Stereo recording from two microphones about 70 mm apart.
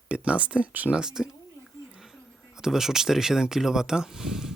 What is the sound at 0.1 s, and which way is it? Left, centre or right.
Speech, centre.